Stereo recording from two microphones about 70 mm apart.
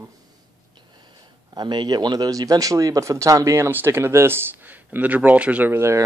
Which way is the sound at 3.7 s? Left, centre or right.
Right.